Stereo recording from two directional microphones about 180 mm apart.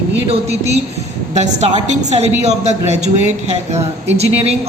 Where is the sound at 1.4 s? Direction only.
35° right (ahead or behind).